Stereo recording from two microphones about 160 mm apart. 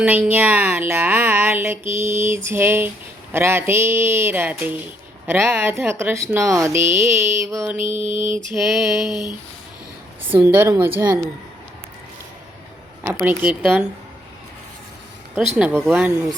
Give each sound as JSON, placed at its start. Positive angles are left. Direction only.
{"t": 0.0, "sound": "speech", "side_deg": -10}
{"t": 7.4, "sound": "music", "side_deg": -20}
{"t": 7.8, "sound": "mantra", "side_deg": 35}
{"t": 8.5, "sound": "a sound", "side_deg": 0}
{"t": 10.2, "sound": "speech", "side_deg": -10}
{"t": 13.0, "sound": "speech", "side_deg": -10}
{"t": 15.4, "sound": "speech", "side_deg": -5}